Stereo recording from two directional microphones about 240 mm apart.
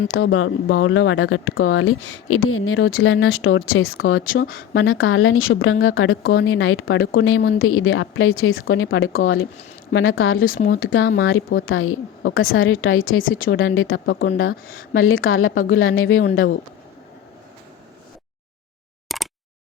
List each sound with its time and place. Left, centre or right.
0.0 s a woman's voice: left
10.5 s speech: left
10.8 s a woman's voice: left
11.0 s speech: left
11.6 s a woman's voice: left
19.0 s a sound: centre